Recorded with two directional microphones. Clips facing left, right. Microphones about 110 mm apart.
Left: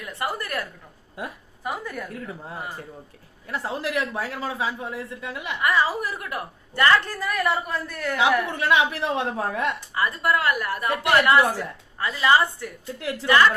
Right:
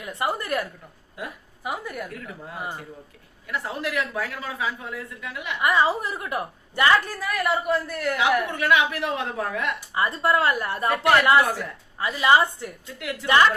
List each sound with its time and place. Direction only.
0.0 s a woman's voice: 20° right (ahead or behind)
2.6 s speech: 30° right (ahead or behind)
3.5 s speech: 30° left (ahead or behind)
5.6 s speech: 20° right (ahead or behind)
7.2 s speech: 5° right (ahead or behind)
8.4 s speech: 30° left (ahead or behind)
9.9 s speech: 25° right (ahead or behind)
11.5 s a woman's voice: 15° right (ahead or behind)
13.0 s a woman's voice: 30° left (ahead or behind)
13.2 s speech: 20° right (ahead or behind)